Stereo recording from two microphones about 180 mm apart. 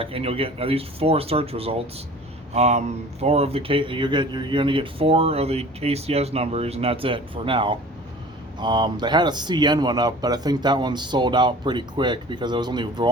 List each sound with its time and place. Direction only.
0.0 s speech: 30° right (ahead or behind)